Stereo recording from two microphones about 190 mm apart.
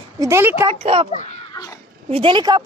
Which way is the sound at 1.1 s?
40° left (ahead or behind).